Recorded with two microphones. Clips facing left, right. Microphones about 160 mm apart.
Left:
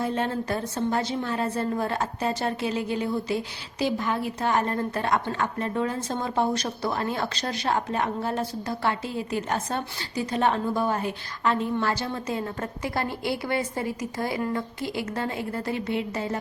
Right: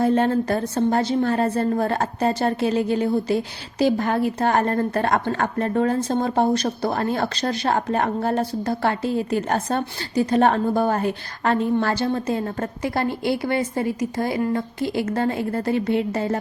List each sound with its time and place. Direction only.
0.0 s a woman's voice: 45° right (ahead or behind)
3.9 s a woman's voice: 55° right (ahead or behind)
12.8 s a woman's voice: 25° right (ahead or behind)
15.0 s a woman's voice: 45° right (ahead or behind)